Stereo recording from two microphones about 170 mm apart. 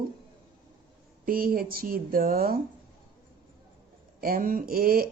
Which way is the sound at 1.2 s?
55° right (ahead or behind).